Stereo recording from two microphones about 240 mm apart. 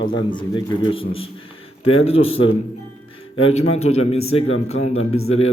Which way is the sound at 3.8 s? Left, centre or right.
Left.